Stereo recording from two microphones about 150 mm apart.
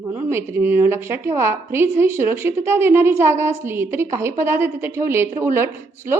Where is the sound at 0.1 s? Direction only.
15° right (ahead or behind).